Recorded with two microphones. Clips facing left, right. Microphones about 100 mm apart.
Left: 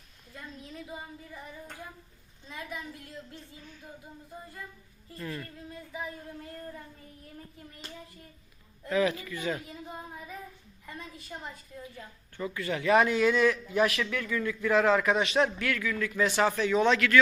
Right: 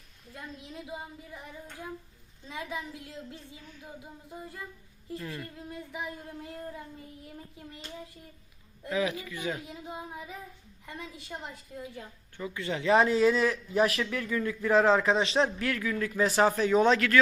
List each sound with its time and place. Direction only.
0.3 s a woman's voice: 15° right (ahead or behind)
2.5 s speech: 20° right (ahead or behind)
5.1 s a woman's voice: 15° right (ahead or behind)
8.9 s a woman's voice: 15° right (ahead or behind)
12.4 s a man's voice: 20° right (ahead or behind); by 17.2 s 35° right (ahead or behind)